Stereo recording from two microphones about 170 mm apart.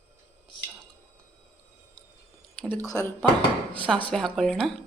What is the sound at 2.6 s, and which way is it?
Speech, 10° left (ahead or behind).